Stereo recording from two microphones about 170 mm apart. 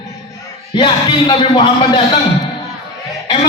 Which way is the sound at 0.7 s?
25° left (ahead or behind).